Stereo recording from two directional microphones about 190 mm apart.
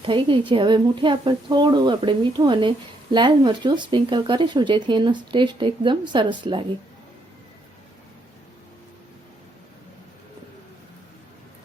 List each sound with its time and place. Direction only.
0.0 s speech: 25° right (ahead or behind)